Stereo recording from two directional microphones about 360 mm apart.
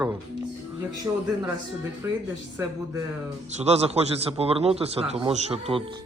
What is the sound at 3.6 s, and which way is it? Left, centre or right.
A man's voice, centre.